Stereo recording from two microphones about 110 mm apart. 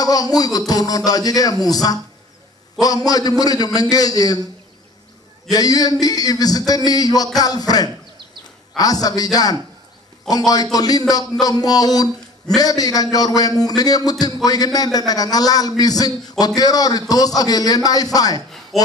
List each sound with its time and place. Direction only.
0.0 s a man's voice: 35° left (ahead or behind)
5.5 s a man's voice: 35° left (ahead or behind)